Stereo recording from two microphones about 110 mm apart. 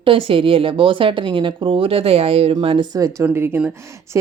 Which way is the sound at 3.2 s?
20° right (ahead or behind).